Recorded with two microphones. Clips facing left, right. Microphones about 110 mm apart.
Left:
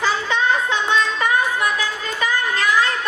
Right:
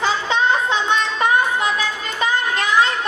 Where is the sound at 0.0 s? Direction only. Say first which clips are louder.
Right 1 dB; 20° right (ahead or behind).